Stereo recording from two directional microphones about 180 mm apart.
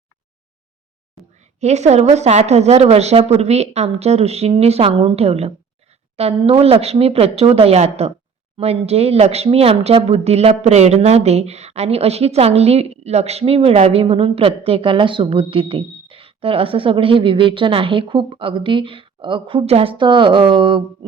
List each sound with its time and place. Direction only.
1.6 s speech: 40° right (ahead or behind)